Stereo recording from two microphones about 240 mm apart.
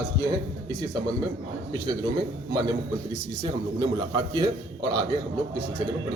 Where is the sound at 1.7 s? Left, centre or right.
Centre.